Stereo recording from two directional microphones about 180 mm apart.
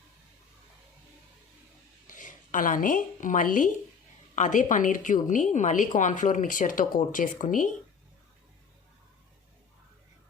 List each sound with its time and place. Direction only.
2.0 s a woman's voice: 45° left (ahead or behind)